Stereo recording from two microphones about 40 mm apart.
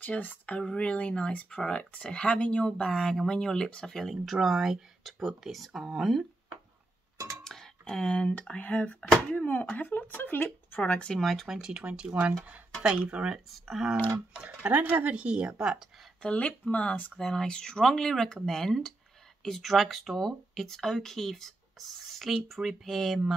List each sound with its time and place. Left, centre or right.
0.1 s speech: left; by 6.2 s centre
7.4 s a sound: centre
8.1 s speech: left
10.8 s speech: left
11.1 s speech: centre
11.8 s speech: right
12.1 s speech: right
13.2 s speech: right
13.5 s speech: centre
14.7 s speech: right
16.2 s speech: left
16.6 s speech: left
17.2 s speech: centre